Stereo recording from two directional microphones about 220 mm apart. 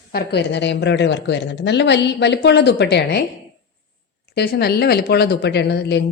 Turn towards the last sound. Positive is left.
turn(degrees=50)  # may be behind; listen again after turning